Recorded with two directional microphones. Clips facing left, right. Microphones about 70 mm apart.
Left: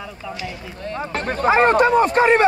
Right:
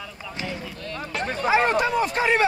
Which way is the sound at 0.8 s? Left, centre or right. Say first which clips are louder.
Left 6 dB; left.